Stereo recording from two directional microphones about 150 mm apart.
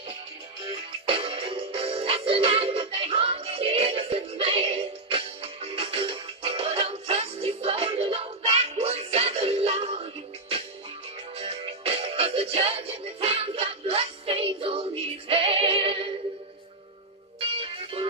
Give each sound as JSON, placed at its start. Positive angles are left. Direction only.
{"t": 0.7, "sound": "music", "side_deg": -35}
{"t": 11.3, "sound": "music", "side_deg": -40}
{"t": 17.4, "sound": "music", "side_deg": -40}